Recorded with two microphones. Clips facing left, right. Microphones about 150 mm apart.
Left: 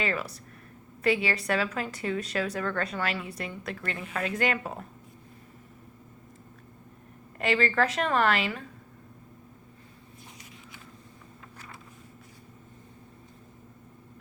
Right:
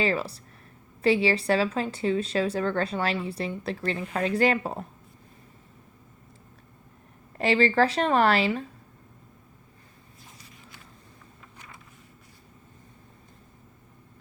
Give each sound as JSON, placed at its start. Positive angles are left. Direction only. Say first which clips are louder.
{"t": 0.0, "sound": "a woman's voice", "louder": "right 5 dB", "side_deg": -30}
{"t": 7.3, "sound": "a woman's voice", "louder": "right 4 dB", "side_deg": -35}